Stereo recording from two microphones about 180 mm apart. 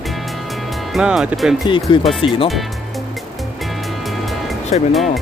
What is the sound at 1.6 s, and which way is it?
Speech, 25° left (ahead or behind).